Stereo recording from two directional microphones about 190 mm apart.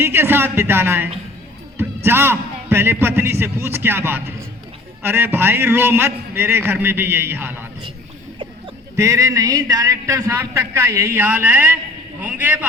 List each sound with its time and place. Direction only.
0.0 s a man's voice: 10° right (ahead or behind)
2.0 s a man's voice: 10° right (ahead or behind)
9.0 s a man's voice: 15° right (ahead or behind)